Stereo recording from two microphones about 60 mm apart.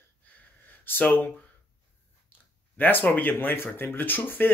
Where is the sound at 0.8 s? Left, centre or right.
Left.